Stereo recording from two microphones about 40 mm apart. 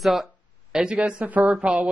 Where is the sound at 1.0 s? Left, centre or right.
Right.